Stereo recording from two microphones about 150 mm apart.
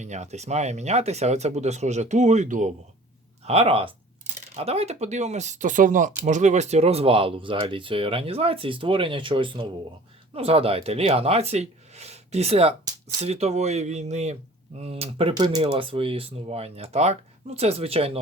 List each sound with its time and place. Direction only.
0.0 s speech: 50° right (ahead or behind)
3.4 s speech: 45° right (ahead or behind)